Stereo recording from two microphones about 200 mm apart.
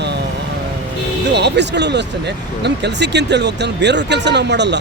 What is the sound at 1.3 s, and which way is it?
Speech, 60° right (ahead or behind).